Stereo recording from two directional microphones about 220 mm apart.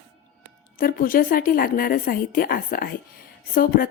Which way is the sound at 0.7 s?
40° left (ahead or behind).